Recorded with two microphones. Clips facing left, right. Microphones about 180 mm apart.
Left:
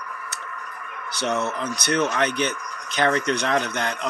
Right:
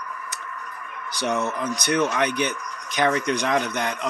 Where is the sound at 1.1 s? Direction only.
15° right (ahead or behind).